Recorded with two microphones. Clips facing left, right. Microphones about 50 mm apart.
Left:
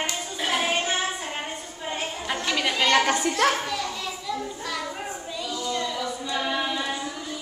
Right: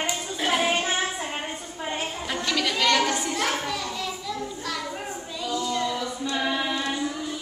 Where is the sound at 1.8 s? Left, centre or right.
Centre.